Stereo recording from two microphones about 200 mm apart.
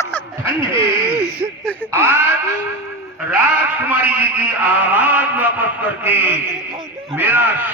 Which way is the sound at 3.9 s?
10° right (ahead or behind).